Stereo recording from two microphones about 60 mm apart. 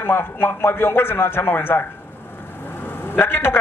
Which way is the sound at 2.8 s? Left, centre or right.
Left.